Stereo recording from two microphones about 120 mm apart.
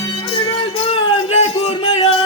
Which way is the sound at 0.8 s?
55° left (ahead or behind).